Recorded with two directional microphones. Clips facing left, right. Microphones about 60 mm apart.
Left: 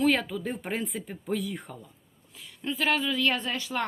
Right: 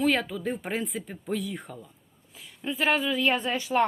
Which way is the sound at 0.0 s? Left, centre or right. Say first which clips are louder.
Even; centre.